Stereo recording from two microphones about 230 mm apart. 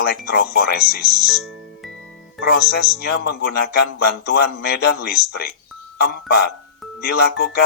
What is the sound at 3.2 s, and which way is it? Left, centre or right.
Speech, left.